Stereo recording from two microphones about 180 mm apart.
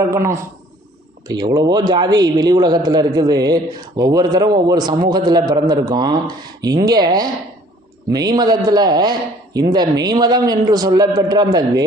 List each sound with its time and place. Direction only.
0.1 s a man's voice: 15° right (ahead or behind)